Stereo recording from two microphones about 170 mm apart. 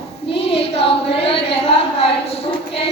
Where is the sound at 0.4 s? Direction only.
35° left (ahead or behind).